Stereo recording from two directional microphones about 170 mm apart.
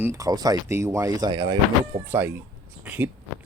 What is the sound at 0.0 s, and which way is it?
Speech, 20° right (ahead or behind).